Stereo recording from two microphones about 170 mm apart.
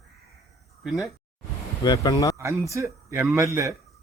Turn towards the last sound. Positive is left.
turn(degrees=-20)  # may be behind; listen again after turning